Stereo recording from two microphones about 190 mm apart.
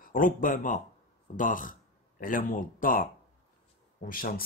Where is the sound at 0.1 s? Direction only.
45° left (ahead or behind).